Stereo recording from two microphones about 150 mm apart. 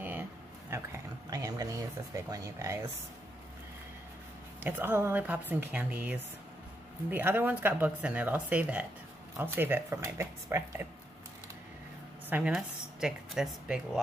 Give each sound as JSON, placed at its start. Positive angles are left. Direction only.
{"t": 0.0, "sound": "a sound", "side_deg": -15}
{"t": 1.3, "sound": "speech", "side_deg": -25}
{"t": 4.6, "sound": "speech", "side_deg": -15}
{"t": 12.3, "sound": "speech", "side_deg": -10}